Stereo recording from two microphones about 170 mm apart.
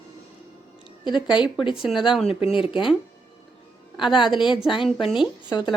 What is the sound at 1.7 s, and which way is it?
Speech, 5° right (ahead or behind).